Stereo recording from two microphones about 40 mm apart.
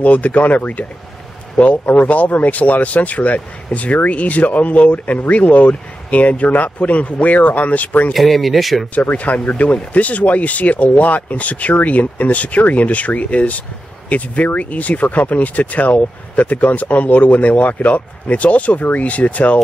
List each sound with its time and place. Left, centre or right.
0.0 s speech: left
8.1 s speech: centre
9.1 s speech: left